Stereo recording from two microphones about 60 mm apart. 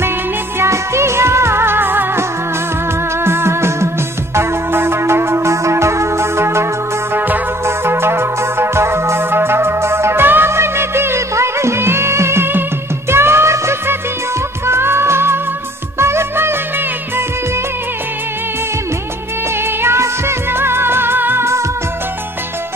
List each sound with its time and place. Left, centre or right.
0.6 s music: right
16.0 s music of bollywood: right
19.6 s music of bollywood: right